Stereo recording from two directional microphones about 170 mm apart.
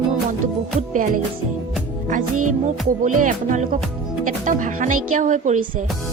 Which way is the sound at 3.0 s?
50° right (ahead or behind).